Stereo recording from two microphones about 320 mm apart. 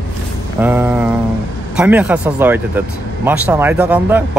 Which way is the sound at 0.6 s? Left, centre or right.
Centre.